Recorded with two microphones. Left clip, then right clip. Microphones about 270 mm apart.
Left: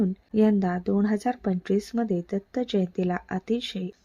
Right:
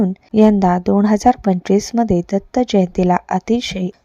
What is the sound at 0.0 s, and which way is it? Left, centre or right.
A woman's voice, right.